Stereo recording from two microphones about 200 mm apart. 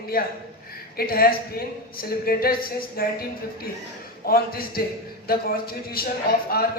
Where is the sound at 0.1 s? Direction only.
45° left (ahead or behind).